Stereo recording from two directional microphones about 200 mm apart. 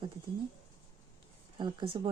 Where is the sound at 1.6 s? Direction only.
25° right (ahead or behind).